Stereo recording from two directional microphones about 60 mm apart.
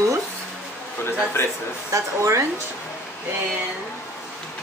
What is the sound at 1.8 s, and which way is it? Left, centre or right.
Speech, right.